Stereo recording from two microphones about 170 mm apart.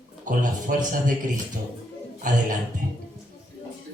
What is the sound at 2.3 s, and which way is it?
Speech, 50° right (ahead or behind).